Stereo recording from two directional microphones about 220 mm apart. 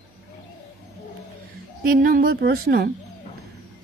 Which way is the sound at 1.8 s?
40° right (ahead or behind).